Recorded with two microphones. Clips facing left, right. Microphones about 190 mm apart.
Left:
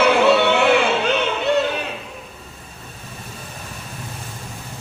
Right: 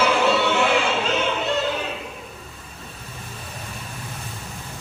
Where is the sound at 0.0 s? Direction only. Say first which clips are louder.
Left 5 dB; 65° left (ahead or behind).